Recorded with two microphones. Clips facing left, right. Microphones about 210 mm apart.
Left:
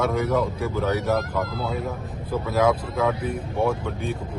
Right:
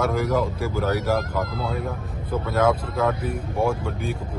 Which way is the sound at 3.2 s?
5° right (ahead or behind).